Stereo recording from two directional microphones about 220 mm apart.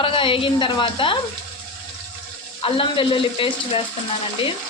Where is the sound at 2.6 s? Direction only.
25° left (ahead or behind).